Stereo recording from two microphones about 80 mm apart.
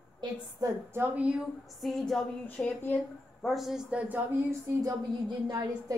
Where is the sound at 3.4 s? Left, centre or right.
Centre.